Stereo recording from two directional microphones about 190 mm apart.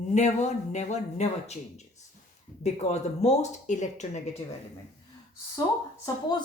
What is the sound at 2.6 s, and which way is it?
Speech, 35° left (ahead or behind).